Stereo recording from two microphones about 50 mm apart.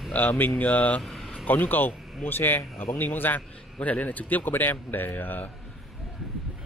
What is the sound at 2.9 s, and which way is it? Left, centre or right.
Speech, left.